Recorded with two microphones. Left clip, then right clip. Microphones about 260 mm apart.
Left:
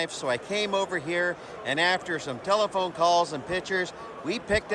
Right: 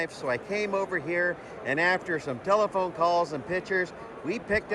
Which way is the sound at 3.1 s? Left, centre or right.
Left.